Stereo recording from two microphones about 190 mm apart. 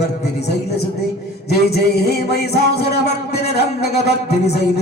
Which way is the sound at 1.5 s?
55° left (ahead or behind).